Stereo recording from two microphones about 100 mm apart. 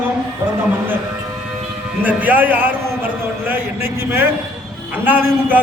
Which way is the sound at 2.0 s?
15° right (ahead or behind).